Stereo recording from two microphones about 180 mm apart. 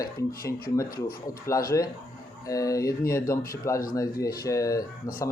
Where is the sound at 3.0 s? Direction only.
55° left (ahead or behind).